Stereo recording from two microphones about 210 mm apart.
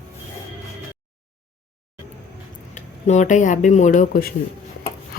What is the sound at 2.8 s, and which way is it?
Speech, 35° left (ahead or behind).